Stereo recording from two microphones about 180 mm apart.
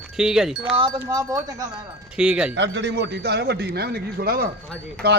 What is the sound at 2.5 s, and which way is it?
A man's voice, 75° right (ahead or behind).